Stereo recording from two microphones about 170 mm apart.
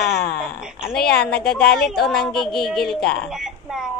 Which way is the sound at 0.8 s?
65° left (ahead or behind).